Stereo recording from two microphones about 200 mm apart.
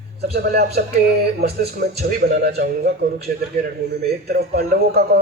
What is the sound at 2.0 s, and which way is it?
A man's voice, 50° right (ahead or behind).